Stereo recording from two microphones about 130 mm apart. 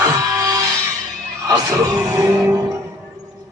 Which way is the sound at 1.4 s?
25° right (ahead or behind).